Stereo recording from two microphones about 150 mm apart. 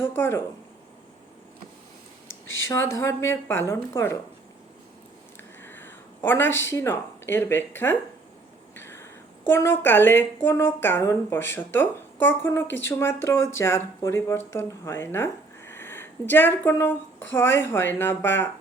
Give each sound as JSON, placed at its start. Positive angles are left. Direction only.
{"t": 0.0, "sound": "speech", "side_deg": 15}
{"t": 2.2, "sound": "speech", "side_deg": 15}
{"t": 5.6, "sound": "speech", "side_deg": 15}
{"t": 8.7, "sound": "a sound", "side_deg": 15}
{"t": 9.5, "sound": "speech", "side_deg": 15}